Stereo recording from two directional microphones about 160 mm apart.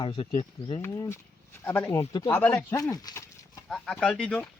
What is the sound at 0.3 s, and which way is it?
Speech, 20° left (ahead or behind).